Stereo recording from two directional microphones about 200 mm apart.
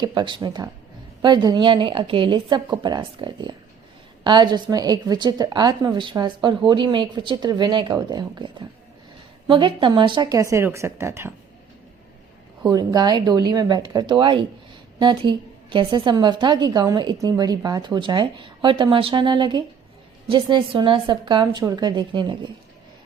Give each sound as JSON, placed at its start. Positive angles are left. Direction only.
{"t": 0.0, "sound": "a woman's voice", "side_deg": -20}
{"t": 12.6, "sound": "a woman's voice", "side_deg": -20}